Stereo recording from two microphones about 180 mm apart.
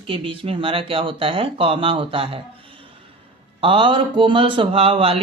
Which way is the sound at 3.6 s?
30° right (ahead or behind).